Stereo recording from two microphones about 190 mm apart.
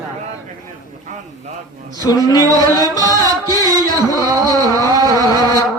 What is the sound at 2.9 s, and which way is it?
Music, 20° left (ahead or behind).